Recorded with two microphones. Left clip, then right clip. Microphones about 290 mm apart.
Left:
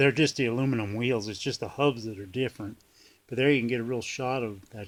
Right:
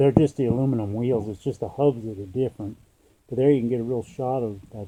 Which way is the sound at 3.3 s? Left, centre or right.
Centre.